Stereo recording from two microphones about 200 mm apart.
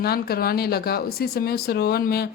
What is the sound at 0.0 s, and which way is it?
Speech, 50° left (ahead or behind).